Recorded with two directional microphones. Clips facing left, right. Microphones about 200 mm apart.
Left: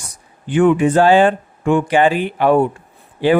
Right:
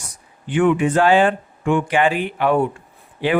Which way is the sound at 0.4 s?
40° left (ahead or behind).